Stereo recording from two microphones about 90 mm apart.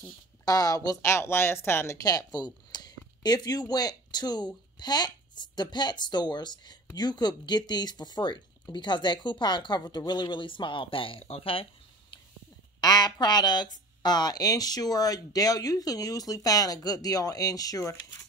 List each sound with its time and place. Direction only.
0.5 s speech: 45° left (ahead or behind)
1.0 s speech: 30° left (ahead or behind)
2.0 s speech: 45° left (ahead or behind); by 12.2 s 90° left
12.8 s speech: 50° left (ahead or behind)